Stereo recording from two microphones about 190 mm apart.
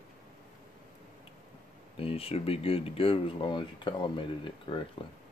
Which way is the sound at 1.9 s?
30° left (ahead or behind).